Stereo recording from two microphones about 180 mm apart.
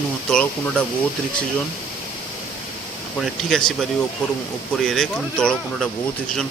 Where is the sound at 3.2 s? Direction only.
Centre (ahead or behind).